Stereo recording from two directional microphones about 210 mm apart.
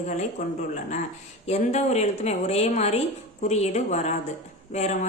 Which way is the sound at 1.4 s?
30° left (ahead or behind).